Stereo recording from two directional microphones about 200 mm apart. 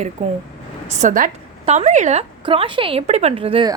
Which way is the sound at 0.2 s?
30° right (ahead or behind).